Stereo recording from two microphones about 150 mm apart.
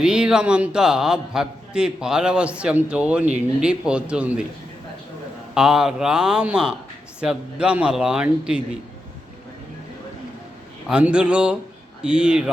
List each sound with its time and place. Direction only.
0.0 s a man's voice: 5° right (ahead or behind)
5.5 s a man's voice: 5° right (ahead or behind)
10.8 s speech: 5° right (ahead or behind)